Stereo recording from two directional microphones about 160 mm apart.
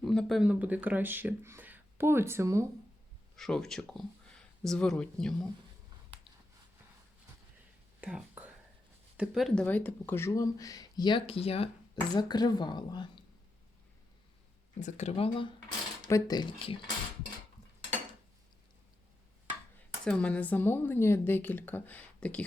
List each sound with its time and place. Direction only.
0.0 s speech: centre (ahead or behind); by 2.6 s 15° right (ahead or behind)
3.3 s speech: centre (ahead or behind)
8.0 s whispering: 10° right (ahead or behind)
9.1 s speech: 5° right (ahead or behind)
9.6 s speech: 10° left (ahead or behind); by 11.7 s 40° left (ahead or behind)
12.1 s speech: 25° left (ahead or behind)
14.8 s speech: 50° left (ahead or behind)
16.0 s speech: 20° left (ahead or behind)
20.1 s speech: 10° left (ahead or behind)